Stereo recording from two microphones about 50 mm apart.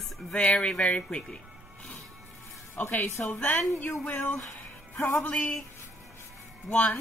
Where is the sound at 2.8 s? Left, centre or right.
Left.